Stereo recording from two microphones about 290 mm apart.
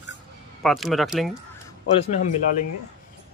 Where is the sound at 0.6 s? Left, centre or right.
Centre.